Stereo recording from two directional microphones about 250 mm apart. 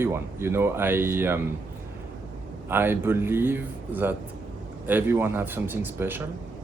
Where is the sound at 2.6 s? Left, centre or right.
Centre.